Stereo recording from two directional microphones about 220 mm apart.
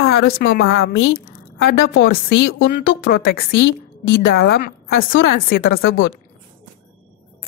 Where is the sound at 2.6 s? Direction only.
45° left (ahead or behind).